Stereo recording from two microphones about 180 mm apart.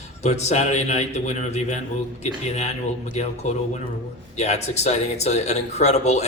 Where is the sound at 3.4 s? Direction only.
40° left (ahead or behind).